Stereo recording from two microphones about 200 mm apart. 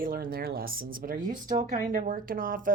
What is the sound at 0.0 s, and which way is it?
Speech, 45° right (ahead or behind).